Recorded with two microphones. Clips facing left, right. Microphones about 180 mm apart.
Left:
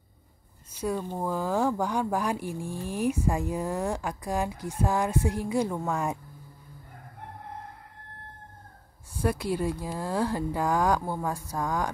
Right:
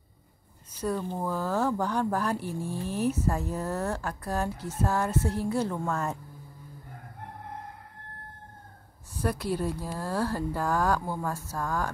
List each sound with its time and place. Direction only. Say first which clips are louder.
0.7 s speech: even; 10° left (ahead or behind)
9.1 s speech: left 2 dB; 10° left (ahead or behind)